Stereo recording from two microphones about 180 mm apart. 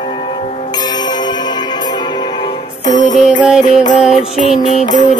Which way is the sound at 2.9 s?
45° left (ahead or behind).